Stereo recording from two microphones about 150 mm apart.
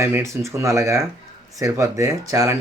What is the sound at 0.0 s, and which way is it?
Speech, 20° right (ahead or behind).